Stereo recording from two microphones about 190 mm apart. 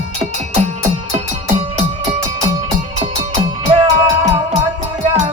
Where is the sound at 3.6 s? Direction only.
25° right (ahead or behind).